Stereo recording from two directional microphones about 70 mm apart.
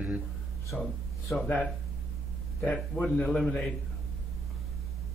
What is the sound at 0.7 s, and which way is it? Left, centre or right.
Speech, centre.